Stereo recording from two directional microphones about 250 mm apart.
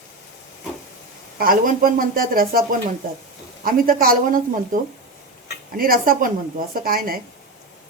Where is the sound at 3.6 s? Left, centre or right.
Right.